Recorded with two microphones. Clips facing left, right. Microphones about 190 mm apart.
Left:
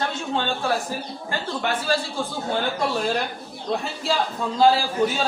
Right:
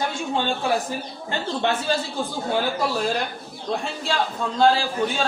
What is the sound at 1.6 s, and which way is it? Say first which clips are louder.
Speech: right 2 dB; 25° right (ahead or behind).